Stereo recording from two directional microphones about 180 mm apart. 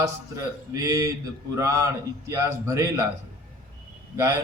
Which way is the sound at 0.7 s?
20° right (ahead or behind).